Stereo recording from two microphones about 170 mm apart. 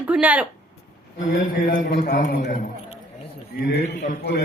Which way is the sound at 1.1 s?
50° left (ahead or behind).